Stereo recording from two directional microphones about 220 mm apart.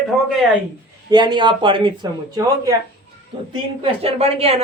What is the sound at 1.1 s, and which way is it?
Speech, 20° right (ahead or behind).